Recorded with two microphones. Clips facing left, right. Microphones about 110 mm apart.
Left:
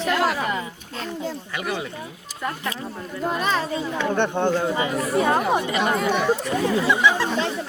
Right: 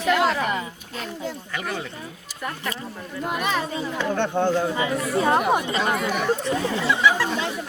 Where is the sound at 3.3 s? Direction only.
35° left (ahead or behind).